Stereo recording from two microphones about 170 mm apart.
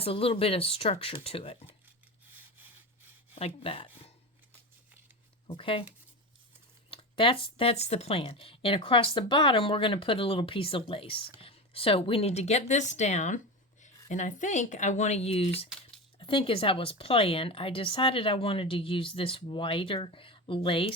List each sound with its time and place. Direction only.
0.0 s speech: 35° left (ahead or behind)
3.3 s speech: 35° left (ahead or behind)
5.5 s speech: 30° left (ahead or behind)
6.9 s speech: 30° left (ahead or behind)